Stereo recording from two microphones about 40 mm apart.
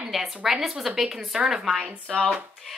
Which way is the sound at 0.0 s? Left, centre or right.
Centre.